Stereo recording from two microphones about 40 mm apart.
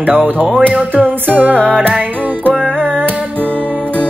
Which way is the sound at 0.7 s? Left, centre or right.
Right.